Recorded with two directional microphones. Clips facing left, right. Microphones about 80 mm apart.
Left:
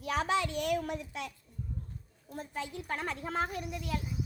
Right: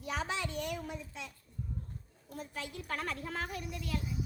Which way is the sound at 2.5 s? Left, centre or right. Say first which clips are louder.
Left 4 dB; left.